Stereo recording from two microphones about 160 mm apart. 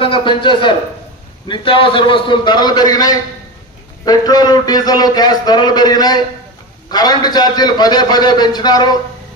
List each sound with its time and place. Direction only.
0.0 s a man's voice: 30° left (ahead or behind)